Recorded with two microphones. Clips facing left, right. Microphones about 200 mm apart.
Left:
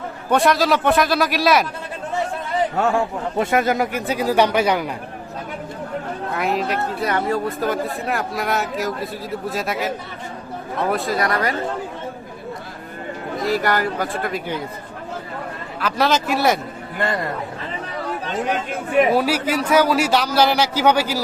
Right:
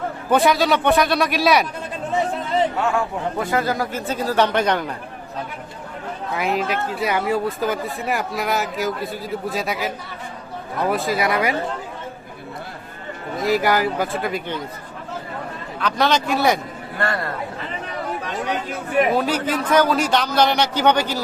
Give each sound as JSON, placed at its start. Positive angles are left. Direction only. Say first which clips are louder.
{"t": 0.3, "sound": "speech", "louder": "even", "side_deg": 0}
{"t": 2.9, "sound": "a man's voice", "louder": "left 2 dB", "side_deg": 25}
{"t": 6.3, "sound": "speech", "louder": "even", "side_deg": 0}
{"t": 13.4, "sound": "speech", "louder": "right 2 dB", "side_deg": 0}
{"t": 15.8, "sound": "speech", "louder": "even", "side_deg": 5}
{"t": 17.0, "sound": "a man's voice", "louder": "left 1 dB", "side_deg": 15}
{"t": 19.1, "sound": "a man's voice", "louder": "left 2 dB", "side_deg": 10}